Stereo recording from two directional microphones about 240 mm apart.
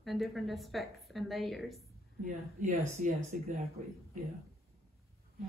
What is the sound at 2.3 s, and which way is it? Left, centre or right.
A woman's voice, right.